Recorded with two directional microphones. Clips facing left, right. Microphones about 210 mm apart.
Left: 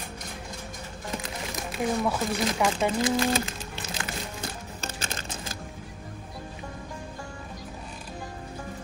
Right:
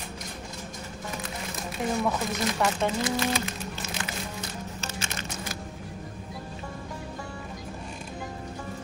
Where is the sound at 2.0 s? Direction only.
10° left (ahead or behind).